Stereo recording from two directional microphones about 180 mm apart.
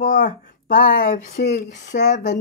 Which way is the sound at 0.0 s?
50° left (ahead or behind).